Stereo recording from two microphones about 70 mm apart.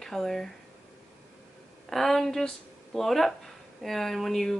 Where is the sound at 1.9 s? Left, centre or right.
Centre.